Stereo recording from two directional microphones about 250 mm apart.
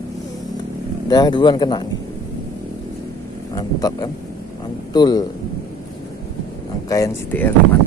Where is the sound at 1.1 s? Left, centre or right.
Centre.